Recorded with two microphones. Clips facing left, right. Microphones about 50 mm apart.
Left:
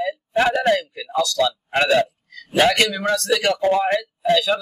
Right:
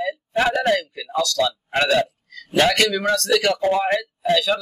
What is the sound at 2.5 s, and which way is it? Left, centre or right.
Speech, centre.